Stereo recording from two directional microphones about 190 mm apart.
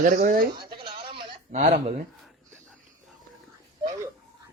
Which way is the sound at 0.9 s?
25° right (ahead or behind).